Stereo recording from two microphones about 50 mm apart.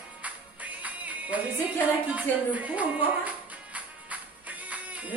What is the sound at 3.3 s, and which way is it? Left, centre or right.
Music, right.